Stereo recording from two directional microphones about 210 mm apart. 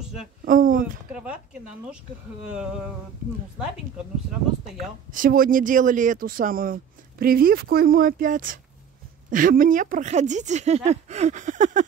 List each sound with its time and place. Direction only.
0.0 s a sound: 5° right (ahead or behind)
0.5 s speech: 40° right (ahead or behind)
1.1 s speech: 5° right (ahead or behind)
3.5 s speech: 5° right (ahead or behind)
5.1 s speech: 40° right (ahead or behind)